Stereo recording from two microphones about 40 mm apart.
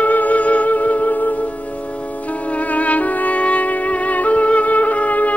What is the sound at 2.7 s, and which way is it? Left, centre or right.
Music, left.